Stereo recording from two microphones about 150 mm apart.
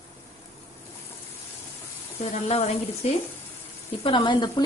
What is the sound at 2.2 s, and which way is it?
Speech, 45° left (ahead or behind).